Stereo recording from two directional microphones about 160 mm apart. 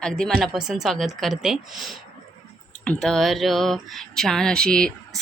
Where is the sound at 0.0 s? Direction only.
Centre (ahead or behind).